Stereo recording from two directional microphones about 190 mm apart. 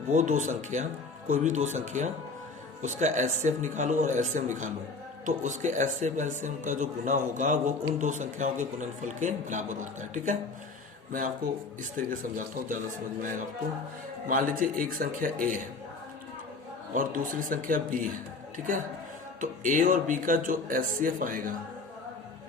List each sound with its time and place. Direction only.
0.1 s a man's voice: 40° right (ahead or behind)
11.8 s speech: 45° right (ahead or behind)
14.3 s speech: 45° right (ahead or behind)
16.9 s a woman's voice: 45° right (ahead or behind)